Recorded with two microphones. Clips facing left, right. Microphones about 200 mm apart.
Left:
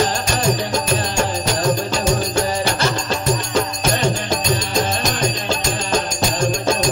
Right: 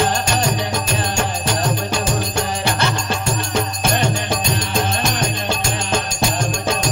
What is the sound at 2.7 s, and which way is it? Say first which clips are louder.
Music: left 1 dB; 55° right (ahead or behind).